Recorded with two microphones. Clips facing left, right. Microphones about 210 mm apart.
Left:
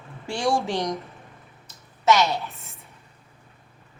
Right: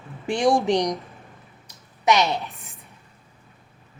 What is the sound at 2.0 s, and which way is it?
Speech, 20° right (ahead or behind).